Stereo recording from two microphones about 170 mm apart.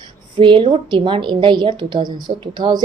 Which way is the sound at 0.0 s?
30° right (ahead or behind).